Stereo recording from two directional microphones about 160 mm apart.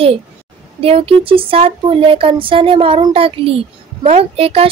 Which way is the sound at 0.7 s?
35° right (ahead or behind).